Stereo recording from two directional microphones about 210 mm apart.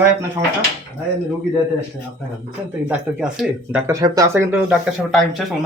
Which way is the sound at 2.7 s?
5° right (ahead or behind).